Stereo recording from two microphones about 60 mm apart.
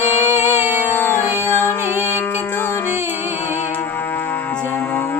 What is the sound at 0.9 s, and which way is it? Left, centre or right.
Music, left.